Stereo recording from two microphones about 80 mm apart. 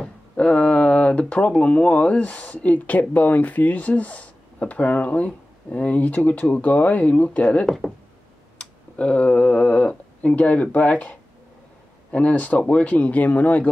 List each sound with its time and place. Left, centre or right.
0.0 s speech: centre
7.6 s speech: centre
8.5 s speech: centre